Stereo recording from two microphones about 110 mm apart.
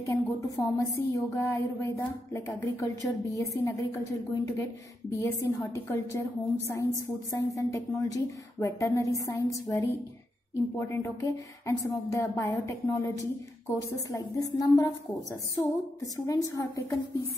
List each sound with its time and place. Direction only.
0.0 s a woman's voice: 25° left (ahead or behind)
7.2 s speech: 30° left (ahead or behind)